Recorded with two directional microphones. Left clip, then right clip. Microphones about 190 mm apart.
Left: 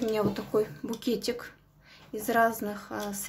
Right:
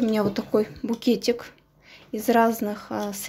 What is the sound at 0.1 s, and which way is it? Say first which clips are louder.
Speech: right 4 dB; 30° right (ahead or behind).